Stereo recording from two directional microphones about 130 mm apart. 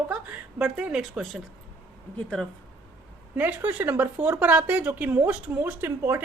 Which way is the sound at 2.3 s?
5° left (ahead or behind).